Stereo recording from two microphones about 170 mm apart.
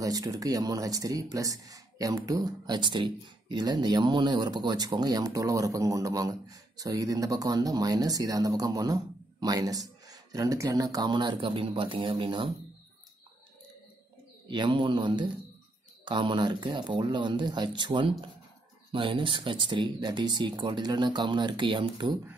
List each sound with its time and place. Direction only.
0.0 s speech: 20° right (ahead or behind)
14.5 s speech: 30° right (ahead or behind)